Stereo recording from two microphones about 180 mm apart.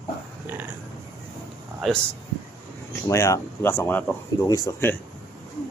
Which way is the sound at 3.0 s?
15° left (ahead or behind).